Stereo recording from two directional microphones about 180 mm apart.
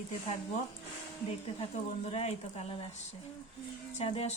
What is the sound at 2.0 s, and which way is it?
Speech, 35° left (ahead or behind).